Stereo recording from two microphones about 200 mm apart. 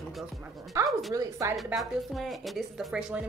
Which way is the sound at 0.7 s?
15° right (ahead or behind).